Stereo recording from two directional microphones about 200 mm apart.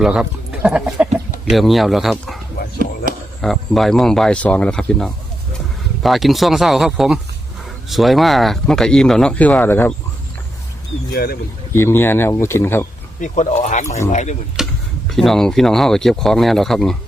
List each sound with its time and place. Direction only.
0.0 s speech: 5° right (ahead or behind)
3.1 s a sound: 45° right (ahead or behind)
3.4 s speech: centre (ahead or behind)
11.1 s speech: 50° left (ahead or behind)
11.7 s speech: 10° left (ahead or behind)
13.1 s speech: 40° left (ahead or behind)
14.6 s tick-tock: centre (ahead or behind)
15.1 s speech: centre (ahead or behind)